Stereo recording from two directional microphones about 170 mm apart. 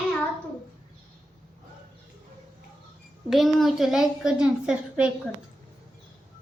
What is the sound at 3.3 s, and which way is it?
A child's voice, centre (ahead or behind).